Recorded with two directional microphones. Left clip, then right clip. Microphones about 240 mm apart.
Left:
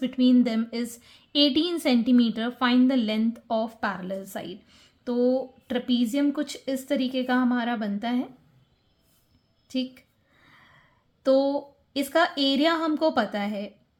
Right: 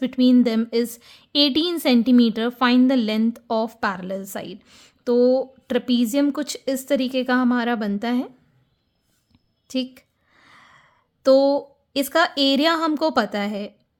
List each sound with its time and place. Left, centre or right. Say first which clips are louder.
0.0 s a woman's voice: right 4 dB; right
9.6 s a woman's voice: right 4 dB; right